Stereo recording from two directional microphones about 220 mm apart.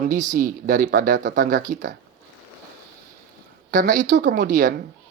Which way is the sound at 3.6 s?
40° right (ahead or behind).